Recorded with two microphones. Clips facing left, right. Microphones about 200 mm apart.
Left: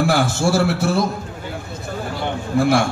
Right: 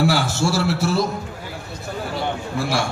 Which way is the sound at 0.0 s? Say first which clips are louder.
Left 2 dB; 50° left (ahead or behind).